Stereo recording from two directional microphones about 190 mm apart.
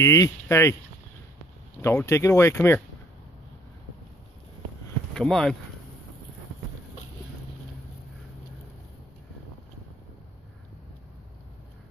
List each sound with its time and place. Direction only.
0.0 s speech: 15° left (ahead or behind)
1.8 s speech: 15° left (ahead or behind)
5.1 s speech: 5° left (ahead or behind)